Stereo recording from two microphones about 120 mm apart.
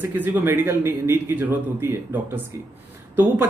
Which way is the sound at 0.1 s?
15° right (ahead or behind).